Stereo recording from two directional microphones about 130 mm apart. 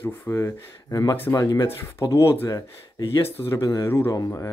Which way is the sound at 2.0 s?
40° left (ahead or behind).